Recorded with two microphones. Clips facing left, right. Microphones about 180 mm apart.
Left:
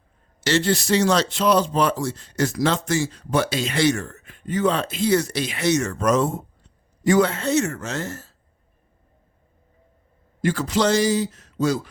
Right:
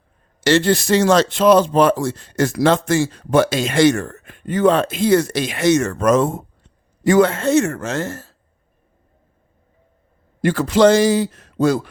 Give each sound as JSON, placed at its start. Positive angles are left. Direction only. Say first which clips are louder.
{"t": 0.4, "sound": "speech", "louder": "right 5 dB", "side_deg": -55}
{"t": 10.4, "sound": "a man's voice", "louder": "right 7 dB", "side_deg": -60}